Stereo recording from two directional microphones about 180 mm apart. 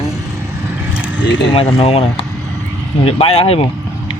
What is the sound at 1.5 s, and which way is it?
Speech, 30° left (ahead or behind).